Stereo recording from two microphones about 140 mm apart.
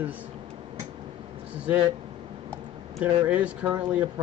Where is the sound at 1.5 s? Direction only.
10° right (ahead or behind).